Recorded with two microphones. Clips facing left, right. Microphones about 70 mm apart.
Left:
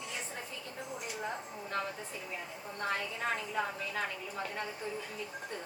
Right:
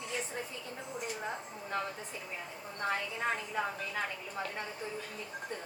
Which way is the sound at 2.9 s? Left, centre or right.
Centre.